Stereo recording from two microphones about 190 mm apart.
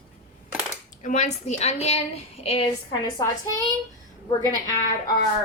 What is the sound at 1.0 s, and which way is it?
A woman's voice, 40° left (ahead or behind).